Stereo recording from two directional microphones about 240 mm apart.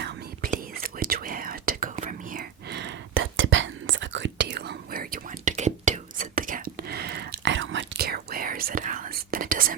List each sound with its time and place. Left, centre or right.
0.0 s whispering: right